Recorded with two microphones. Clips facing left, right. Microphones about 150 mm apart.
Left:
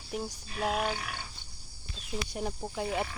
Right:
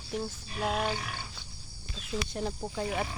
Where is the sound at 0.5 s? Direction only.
Centre (ahead or behind).